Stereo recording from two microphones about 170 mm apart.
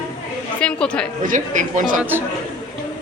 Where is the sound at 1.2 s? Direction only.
50° right (ahead or behind).